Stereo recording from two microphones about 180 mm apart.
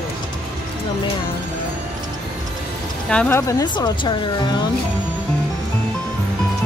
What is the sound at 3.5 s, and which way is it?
Speech, 20° left (ahead or behind).